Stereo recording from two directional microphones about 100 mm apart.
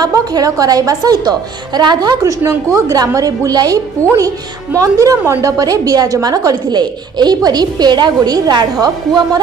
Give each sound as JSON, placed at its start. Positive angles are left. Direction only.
{"t": 0.0, "sound": "a woman's voice", "side_deg": -40}
{"t": 4.0, "sound": "a woman's voice", "side_deg": -30}